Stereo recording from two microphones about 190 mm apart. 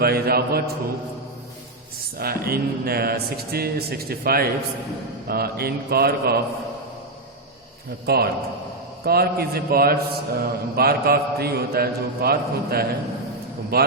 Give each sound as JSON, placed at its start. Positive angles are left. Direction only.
{"t": 0.0, "sound": "speech", "side_deg": -55}
{"t": 2.1, "sound": "a man's voice", "side_deg": -55}
{"t": 8.0, "sound": "a man's voice", "side_deg": -55}